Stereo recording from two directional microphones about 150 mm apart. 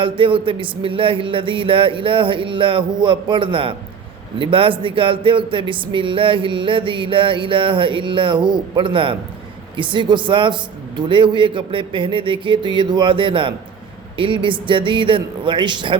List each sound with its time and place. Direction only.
0.0 s speech: 35° right (ahead or behind)